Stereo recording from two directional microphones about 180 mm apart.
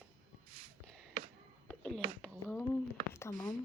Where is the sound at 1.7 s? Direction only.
5° left (ahead or behind).